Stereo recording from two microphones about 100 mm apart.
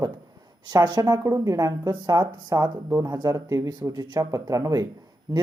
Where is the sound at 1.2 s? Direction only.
35° right (ahead or behind).